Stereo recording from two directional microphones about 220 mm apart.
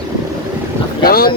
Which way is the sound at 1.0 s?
45° left (ahead or behind).